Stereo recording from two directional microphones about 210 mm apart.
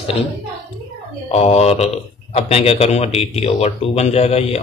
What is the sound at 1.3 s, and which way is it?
Speech, 30° left (ahead or behind).